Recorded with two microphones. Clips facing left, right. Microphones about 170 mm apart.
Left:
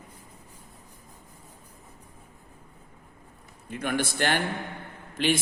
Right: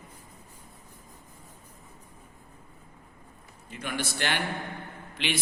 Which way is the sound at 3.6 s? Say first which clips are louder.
Left 5 dB; 55° left (ahead or behind).